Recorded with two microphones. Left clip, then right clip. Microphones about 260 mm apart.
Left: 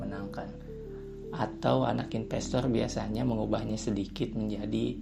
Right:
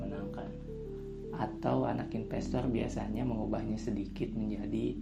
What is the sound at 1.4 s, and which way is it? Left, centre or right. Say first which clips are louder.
Speech: left 5 dB; left.